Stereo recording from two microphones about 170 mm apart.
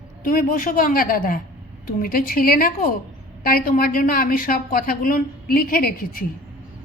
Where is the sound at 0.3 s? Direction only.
55° left (ahead or behind).